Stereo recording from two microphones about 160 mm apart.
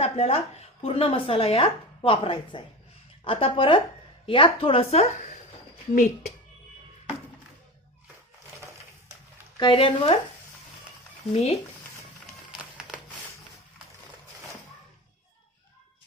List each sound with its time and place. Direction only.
0.0 s speech: 40° left (ahead or behind)
9.6 s speech: 30° left (ahead or behind)
11.3 s speech: 40° left (ahead or behind)